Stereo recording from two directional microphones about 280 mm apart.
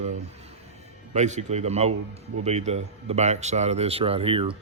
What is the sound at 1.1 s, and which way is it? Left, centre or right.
A man's voice, right.